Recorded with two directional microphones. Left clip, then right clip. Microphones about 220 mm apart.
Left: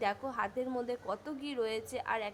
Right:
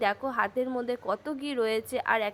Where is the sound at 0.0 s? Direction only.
15° right (ahead or behind).